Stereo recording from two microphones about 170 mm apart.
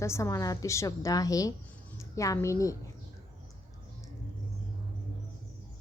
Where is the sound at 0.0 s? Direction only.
15° left (ahead or behind).